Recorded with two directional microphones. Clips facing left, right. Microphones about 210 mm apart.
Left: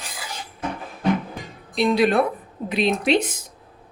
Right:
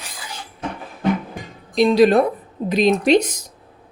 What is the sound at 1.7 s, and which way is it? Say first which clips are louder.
Speech: right 5 dB; 35° right (ahead or behind).